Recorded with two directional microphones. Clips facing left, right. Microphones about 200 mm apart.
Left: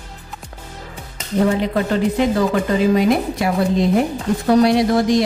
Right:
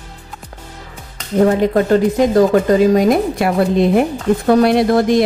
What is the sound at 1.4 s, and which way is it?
Speech, 45° right (ahead or behind).